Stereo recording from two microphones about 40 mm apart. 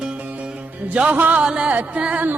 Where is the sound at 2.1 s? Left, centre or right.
Right.